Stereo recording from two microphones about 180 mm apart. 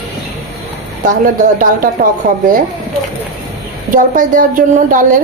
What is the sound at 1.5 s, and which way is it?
A woman's voice, 50° right (ahead or behind).